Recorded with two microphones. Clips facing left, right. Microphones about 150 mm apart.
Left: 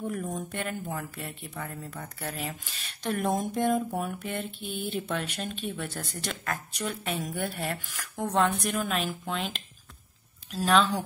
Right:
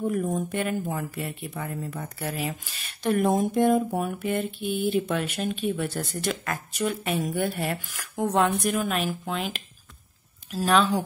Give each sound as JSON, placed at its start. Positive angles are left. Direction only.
{"t": 0.0, "sound": "speech", "side_deg": -10}